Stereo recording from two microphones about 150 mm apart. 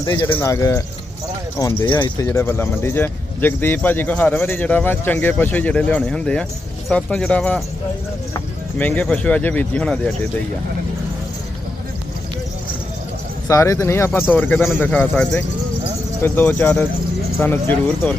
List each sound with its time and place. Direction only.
0.0 s speech: 25° left (ahead or behind)
2.2 s speech: 15° left (ahead or behind)
8.8 s speech: 10° left (ahead or behind)
13.5 s speech: 20° left (ahead or behind)